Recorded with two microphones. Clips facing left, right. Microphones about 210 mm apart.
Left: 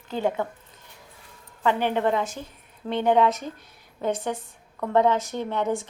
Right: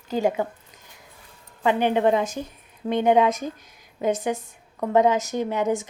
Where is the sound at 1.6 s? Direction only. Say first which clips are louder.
Right 3 dB; 15° right (ahead or behind).